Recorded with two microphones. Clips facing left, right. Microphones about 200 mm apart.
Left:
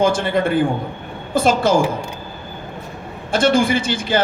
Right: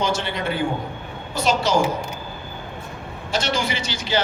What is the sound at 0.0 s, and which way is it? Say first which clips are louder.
A man's voice: left 7 dB; 50° left (ahead or behind).